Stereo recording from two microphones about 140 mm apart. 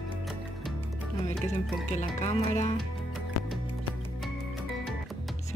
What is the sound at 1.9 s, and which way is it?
Speech, 55° left (ahead or behind).